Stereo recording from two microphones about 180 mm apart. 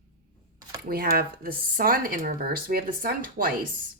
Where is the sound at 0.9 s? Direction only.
55° right (ahead or behind).